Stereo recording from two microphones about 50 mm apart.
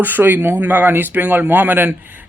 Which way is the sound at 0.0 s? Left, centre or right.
Right.